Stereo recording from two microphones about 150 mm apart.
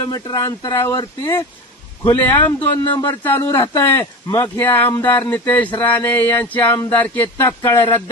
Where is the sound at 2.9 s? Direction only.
35° left (ahead or behind).